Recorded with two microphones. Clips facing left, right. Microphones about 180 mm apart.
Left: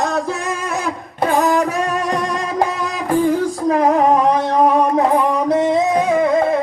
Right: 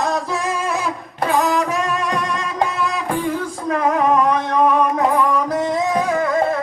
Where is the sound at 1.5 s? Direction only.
40° left (ahead or behind).